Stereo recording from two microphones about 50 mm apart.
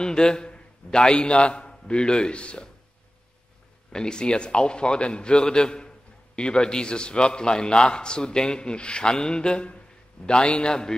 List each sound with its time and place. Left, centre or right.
0.0 s a man's voice: centre
3.9 s a man's voice: centre